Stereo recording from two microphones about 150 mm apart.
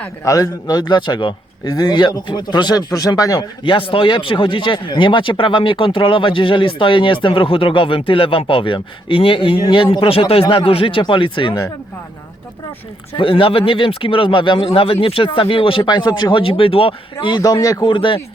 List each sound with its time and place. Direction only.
0.3 s speech: 25° left (ahead or behind)
13.1 s speech: 35° left (ahead or behind)